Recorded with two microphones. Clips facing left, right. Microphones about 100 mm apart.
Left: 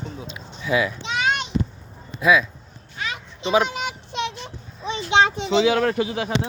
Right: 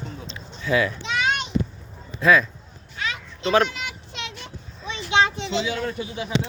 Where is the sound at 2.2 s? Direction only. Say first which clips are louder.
Even; 5° left (ahead or behind).